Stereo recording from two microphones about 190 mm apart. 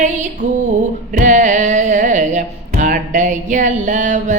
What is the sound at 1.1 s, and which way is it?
Music, 40° right (ahead or behind).